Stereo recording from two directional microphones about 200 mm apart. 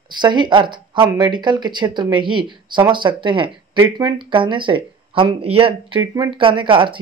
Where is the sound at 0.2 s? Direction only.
20° right (ahead or behind).